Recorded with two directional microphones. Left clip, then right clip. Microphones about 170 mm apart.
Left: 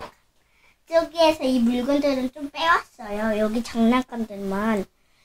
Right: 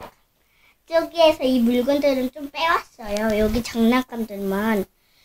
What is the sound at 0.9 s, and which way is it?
Child singing, 45° right (ahead or behind).